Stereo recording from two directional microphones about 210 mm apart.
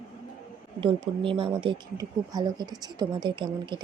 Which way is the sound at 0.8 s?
25° right (ahead or behind).